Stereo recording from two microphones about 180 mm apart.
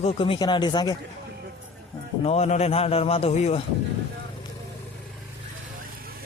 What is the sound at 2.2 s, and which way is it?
Speech, 35° left (ahead or behind).